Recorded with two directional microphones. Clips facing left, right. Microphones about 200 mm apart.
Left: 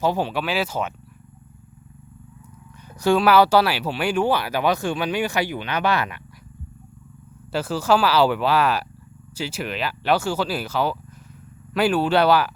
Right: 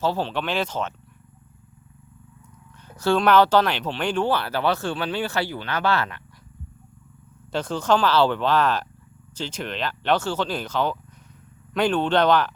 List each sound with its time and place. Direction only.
0.0 s speech: 15° left (ahead or behind)
2.8 s speech: 15° left (ahead or behind)
7.5 s speech: 5° left (ahead or behind)